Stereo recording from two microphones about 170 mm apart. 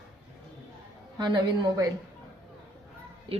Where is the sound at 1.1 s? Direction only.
25° right (ahead or behind).